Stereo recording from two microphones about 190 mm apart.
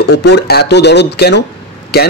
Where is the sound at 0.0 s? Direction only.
60° left (ahead or behind).